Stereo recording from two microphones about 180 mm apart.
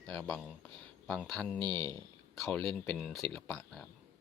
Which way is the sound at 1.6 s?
25° right (ahead or behind).